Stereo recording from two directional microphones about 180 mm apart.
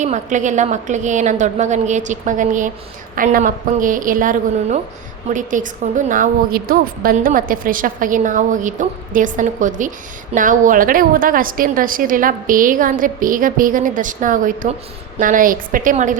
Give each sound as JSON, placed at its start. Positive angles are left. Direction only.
{"t": 0.0, "sound": "a woman's voice", "side_deg": -40}